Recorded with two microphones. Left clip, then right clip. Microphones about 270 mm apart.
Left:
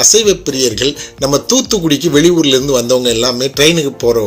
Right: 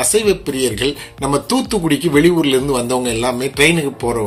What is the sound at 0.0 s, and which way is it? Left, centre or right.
Speech, centre.